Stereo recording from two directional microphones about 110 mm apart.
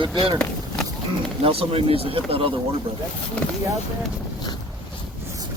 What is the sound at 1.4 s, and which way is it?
Speech, 60° right (ahead or behind).